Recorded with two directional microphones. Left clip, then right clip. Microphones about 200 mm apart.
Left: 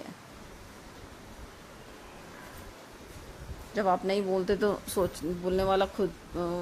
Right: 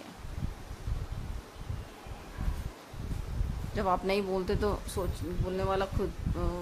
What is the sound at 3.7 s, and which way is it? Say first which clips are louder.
Speech: left 2 dB; 10° left (ahead or behind).